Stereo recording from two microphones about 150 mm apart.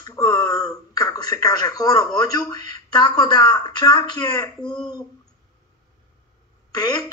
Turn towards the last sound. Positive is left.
turn(degrees=25)  # may be behind; listen again after turning